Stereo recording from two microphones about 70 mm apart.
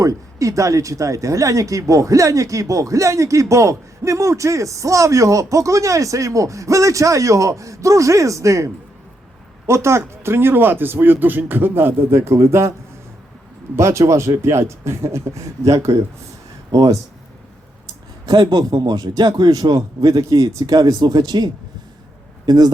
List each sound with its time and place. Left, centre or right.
0.0 s speech: right
13.7 s speech: right
16.7 s speech: right
18.3 s speech: right